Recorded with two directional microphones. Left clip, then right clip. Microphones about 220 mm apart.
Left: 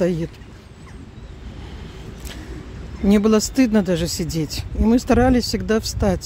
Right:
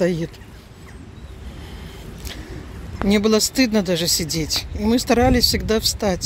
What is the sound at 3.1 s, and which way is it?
Speech, 15° left (ahead or behind).